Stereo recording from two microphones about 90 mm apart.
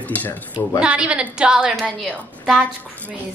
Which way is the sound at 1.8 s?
Centre (ahead or behind).